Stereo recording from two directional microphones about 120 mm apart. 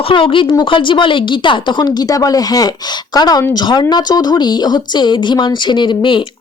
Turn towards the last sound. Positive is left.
turn(degrees=45)  # may be behind; listen again after turning